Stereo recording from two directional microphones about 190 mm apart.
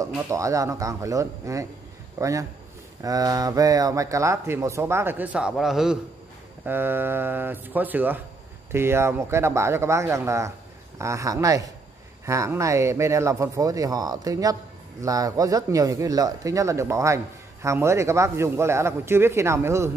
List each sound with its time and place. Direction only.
0.3 s a man's voice: 15° right (ahead or behind)